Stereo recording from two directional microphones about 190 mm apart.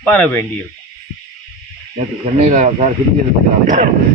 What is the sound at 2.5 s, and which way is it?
Speech, 40° right (ahead or behind).